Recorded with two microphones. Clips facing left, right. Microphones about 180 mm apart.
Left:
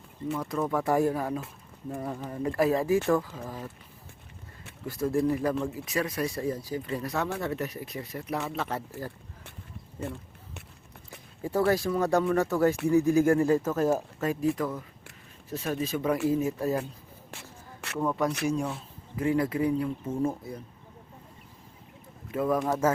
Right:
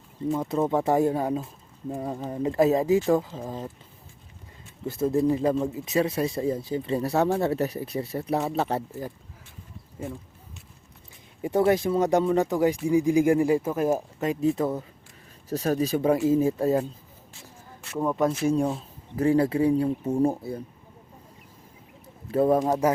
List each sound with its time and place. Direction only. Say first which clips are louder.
0.3 s speech: right 4 dB; 25° right (ahead or behind)
4.9 s speech: right 3 dB; 25° right (ahead or behind)
10.0 s a sound: right 1 dB; 70° left (ahead or behind)
11.4 s speech: right 4 dB; 20° right (ahead or behind)
15.4 s speech: right 6 dB; 40° right (ahead or behind)
17.3 s a sound: left 2 dB; 70° left (ahead or behind)
18.0 s speech: right 4 dB; 20° right (ahead or behind)
20.1 s speech: right 6 dB; 40° right (ahead or behind)
20.3 s speech: right 6 dB; 30° right (ahead or behind)
22.3 s speech: right 6 dB; 30° right (ahead or behind)